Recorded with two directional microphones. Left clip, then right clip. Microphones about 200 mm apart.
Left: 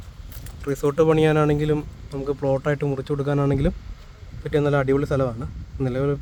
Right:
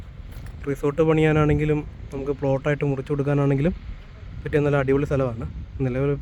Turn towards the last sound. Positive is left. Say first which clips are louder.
# even
turn(degrees=-10)  # may be behind; listen again after turning